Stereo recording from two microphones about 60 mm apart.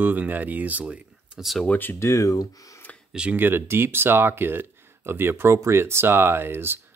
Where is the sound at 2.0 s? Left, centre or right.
Left.